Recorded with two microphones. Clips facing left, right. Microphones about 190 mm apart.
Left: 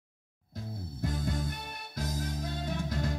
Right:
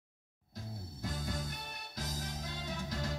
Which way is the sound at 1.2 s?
55° left (ahead or behind).